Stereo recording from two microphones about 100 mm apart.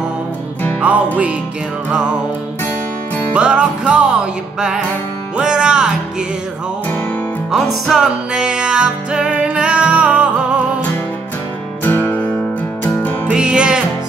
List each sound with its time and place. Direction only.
0.7 s music: 15° right (ahead or behind)
3.3 s music: 10° right (ahead or behind)
7.5 s music: 5° right (ahead or behind)
11.8 s music: 20° left (ahead or behind)
13.3 s music: 10° right (ahead or behind)